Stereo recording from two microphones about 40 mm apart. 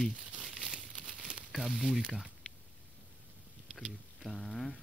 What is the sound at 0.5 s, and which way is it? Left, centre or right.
Crumpling, centre.